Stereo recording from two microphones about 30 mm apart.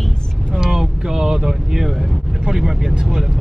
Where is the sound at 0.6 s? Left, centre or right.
Centre.